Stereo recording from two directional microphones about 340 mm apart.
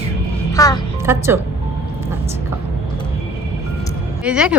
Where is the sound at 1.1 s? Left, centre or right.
Centre.